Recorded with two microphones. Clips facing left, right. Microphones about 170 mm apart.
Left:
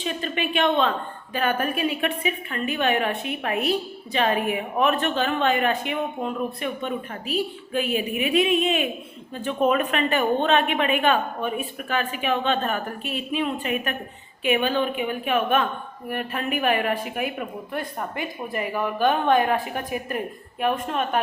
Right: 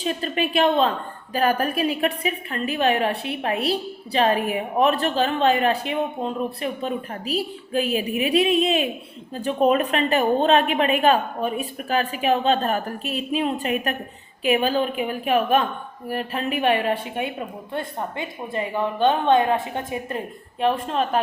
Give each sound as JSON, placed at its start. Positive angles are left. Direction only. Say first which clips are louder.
{"t": 0.0, "sound": "a woman's voice", "louder": "right 3 dB", "side_deg": -35}